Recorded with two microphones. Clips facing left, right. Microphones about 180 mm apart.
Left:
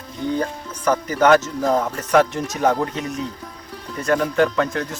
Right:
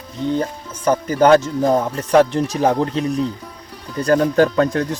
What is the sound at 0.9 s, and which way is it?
Speech, 30° right (ahead or behind).